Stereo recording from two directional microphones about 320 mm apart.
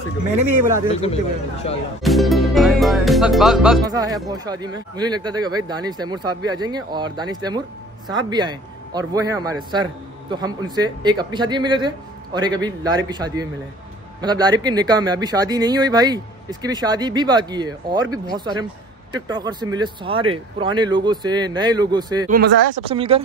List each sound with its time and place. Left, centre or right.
0.4 s speech: right
1.0 s speech: centre
2.0 s music: centre
3.8 s a man's voice: centre
22.3 s speech: right
22.8 s a man's voice: centre